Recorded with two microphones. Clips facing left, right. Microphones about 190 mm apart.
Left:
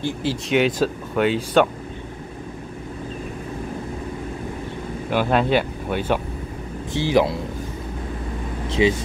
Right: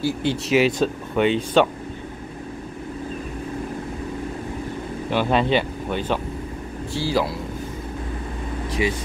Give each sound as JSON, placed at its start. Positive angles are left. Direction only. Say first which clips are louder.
{"t": 0.2, "sound": "speech", "louder": "even", "side_deg": 0}
{"t": 5.1, "sound": "speech", "louder": "left 1 dB", "side_deg": 5}
{"t": 8.6, "sound": "vehicle", "louder": "left 5 dB", "side_deg": 25}